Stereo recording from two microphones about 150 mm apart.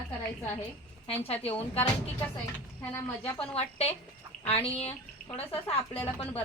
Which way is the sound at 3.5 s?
45° left (ahead or behind).